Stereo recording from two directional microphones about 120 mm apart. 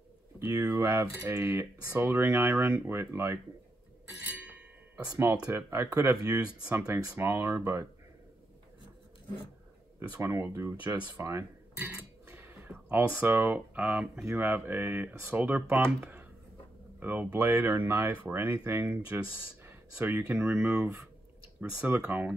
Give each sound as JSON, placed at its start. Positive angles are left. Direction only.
{"t": 0.5, "sound": "speech", "side_deg": -25}
{"t": 5.5, "sound": "speech", "side_deg": -20}
{"t": 6.4, "sound": "speech", "side_deg": -10}
{"t": 10.1, "sound": "speech", "side_deg": -20}